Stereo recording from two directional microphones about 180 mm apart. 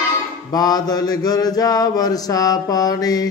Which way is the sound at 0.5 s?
20° left (ahead or behind).